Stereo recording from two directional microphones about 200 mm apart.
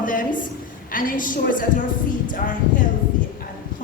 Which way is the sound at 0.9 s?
45° left (ahead or behind).